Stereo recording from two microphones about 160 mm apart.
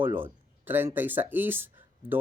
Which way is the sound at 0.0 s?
10° right (ahead or behind).